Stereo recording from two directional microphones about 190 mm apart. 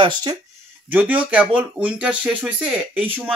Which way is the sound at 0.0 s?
25° right (ahead or behind).